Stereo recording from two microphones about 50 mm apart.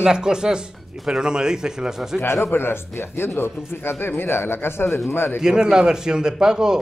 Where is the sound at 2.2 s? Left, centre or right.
Left.